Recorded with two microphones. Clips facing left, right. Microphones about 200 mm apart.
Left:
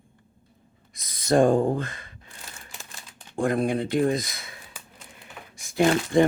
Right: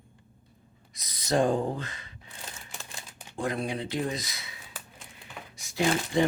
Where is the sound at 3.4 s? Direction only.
50° left (ahead or behind).